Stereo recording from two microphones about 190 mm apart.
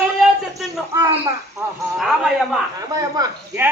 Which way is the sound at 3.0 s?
15° right (ahead or behind).